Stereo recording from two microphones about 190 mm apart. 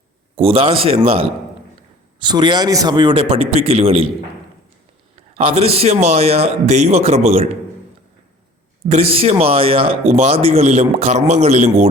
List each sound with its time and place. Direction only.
0.3 s a man's voice: 30° right (ahead or behind)
5.3 s speech: 30° right (ahead or behind)
8.9 s speech: 35° right (ahead or behind)